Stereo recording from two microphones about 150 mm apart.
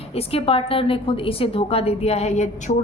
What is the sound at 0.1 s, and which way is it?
A woman's voice, 40° left (ahead or behind).